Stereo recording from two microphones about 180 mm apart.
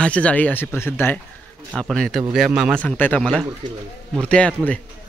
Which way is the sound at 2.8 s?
10° left (ahead or behind).